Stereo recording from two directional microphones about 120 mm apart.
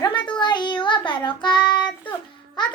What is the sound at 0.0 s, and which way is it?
Child singing, 40° left (ahead or behind).